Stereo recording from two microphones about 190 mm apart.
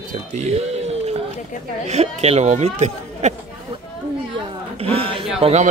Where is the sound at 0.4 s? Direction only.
35° right (ahead or behind).